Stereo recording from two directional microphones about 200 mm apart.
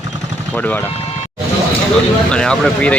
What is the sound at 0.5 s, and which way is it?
Speech, 10° left (ahead or behind).